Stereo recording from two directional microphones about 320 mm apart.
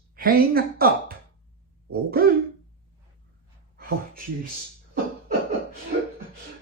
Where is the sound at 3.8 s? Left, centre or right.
Right.